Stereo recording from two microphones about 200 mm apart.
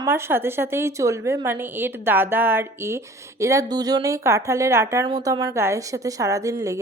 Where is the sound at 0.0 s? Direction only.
10° right (ahead or behind).